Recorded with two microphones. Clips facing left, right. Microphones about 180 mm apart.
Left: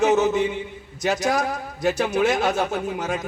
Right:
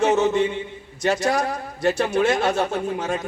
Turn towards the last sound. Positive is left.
turn(degrees=0)  # may be behind; listen again after turning